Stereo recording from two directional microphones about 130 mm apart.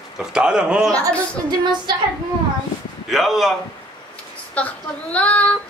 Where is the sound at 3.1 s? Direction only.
Centre (ahead or behind).